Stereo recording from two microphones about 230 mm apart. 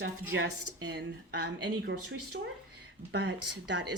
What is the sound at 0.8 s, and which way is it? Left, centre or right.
Speech, right.